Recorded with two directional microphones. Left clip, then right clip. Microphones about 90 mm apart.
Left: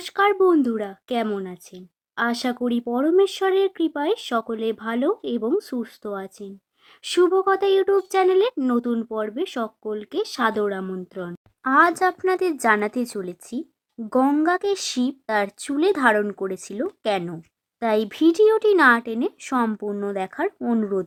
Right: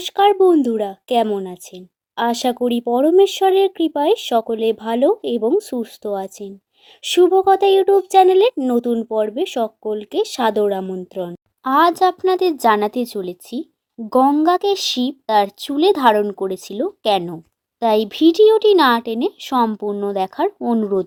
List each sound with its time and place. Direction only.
0.0 s speech: 15° right (ahead or behind)
17.2 s speech: 10° right (ahead or behind)